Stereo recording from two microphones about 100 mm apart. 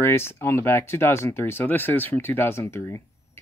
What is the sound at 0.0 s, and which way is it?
Speech, 25° left (ahead or behind).